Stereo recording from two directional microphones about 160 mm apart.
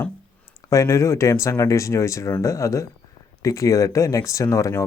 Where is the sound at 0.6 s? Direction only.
20° left (ahead or behind).